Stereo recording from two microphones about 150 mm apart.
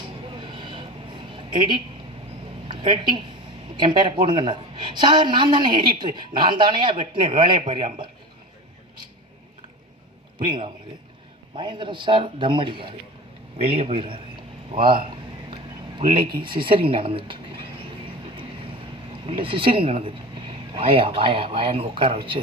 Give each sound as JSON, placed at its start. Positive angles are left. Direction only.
{"t": 0.3, "sound": "a sound", "side_deg": -30}
{"t": 2.6, "sound": "a woman's voice", "side_deg": -30}
{"t": 10.3, "sound": "a man's voice", "side_deg": -30}
{"t": 16.0, "sound": "a woman's voice", "side_deg": -35}
{"t": 19.2, "sound": "a woman's voice", "side_deg": -40}